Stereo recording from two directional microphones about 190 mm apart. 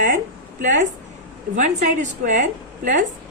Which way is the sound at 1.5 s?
40° right (ahead or behind).